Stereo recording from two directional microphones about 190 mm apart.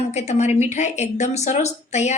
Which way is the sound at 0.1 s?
35° left (ahead or behind).